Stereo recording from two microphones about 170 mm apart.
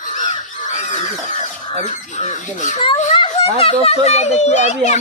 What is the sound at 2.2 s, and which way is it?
Speech, 45° left (ahead or behind).